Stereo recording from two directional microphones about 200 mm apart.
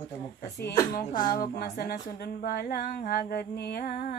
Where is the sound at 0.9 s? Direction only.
45° left (ahead or behind).